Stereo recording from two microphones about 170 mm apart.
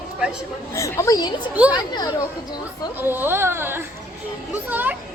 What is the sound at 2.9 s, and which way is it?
A woman's voice, 10° right (ahead or behind).